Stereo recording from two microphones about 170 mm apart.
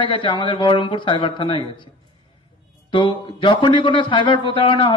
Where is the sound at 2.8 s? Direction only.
30° left (ahead or behind).